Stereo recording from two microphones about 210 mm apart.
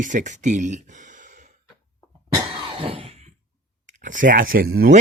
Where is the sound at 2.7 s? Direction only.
25° right (ahead or behind).